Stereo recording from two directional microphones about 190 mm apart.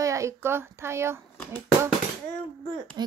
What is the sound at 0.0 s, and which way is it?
A woman's voice, 15° right (ahead or behind).